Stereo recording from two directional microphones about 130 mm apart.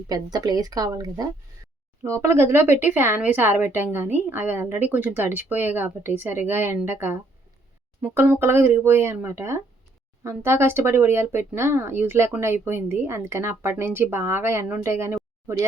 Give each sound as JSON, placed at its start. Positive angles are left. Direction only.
{"t": 0.1, "sound": "a woman's voice", "side_deg": -30}